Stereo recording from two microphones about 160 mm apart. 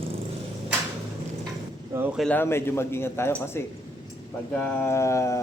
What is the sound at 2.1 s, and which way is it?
Speech, 5° left (ahead or behind).